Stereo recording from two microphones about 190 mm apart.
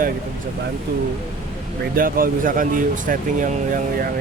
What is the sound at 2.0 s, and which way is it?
Speech, 50° right (ahead or behind).